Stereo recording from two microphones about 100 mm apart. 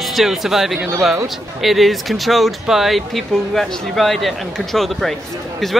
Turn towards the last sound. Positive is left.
turn(degrees=5)  # may be behind; listen again after turning